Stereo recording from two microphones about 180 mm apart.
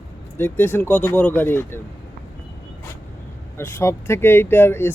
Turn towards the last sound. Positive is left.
turn(degrees=15)  # may be behind; listen again after turning